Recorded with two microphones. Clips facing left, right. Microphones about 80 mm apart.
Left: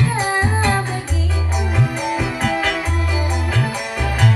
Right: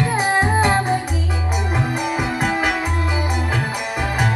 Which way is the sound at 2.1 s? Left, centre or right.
Centre.